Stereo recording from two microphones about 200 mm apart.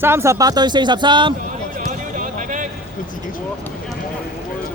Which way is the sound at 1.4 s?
40° right (ahead or behind).